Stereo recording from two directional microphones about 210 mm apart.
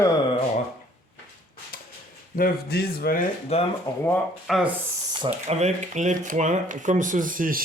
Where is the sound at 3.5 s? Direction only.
30° left (ahead or behind).